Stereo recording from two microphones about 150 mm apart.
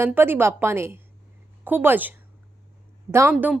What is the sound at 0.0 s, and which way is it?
A woman's voice, 15° right (ahead or behind).